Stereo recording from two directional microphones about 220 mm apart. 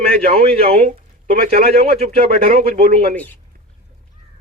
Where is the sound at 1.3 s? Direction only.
40° right (ahead or behind).